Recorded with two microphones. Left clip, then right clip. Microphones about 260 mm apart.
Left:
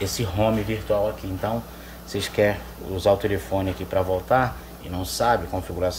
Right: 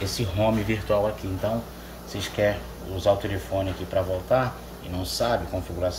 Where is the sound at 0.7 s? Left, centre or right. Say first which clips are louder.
Right 1 dB; centre.